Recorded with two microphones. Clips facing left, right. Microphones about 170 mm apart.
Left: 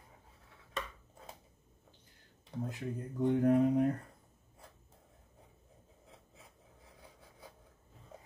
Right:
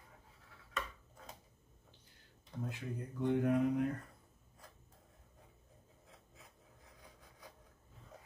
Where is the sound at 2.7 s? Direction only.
35° left (ahead or behind).